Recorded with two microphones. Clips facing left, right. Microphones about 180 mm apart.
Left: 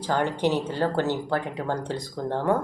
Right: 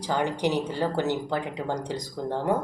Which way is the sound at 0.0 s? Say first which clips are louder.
Left 2 dB; 15° right (ahead or behind).